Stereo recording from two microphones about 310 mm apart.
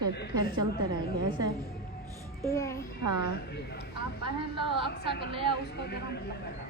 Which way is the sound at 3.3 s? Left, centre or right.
Left.